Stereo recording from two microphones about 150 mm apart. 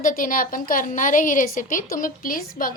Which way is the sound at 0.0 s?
65° left (ahead or behind).